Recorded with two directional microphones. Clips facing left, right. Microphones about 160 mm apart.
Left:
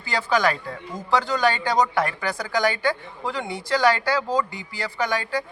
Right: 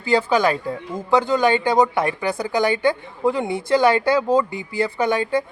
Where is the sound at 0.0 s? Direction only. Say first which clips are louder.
Right 5 dB; 20° right (ahead or behind).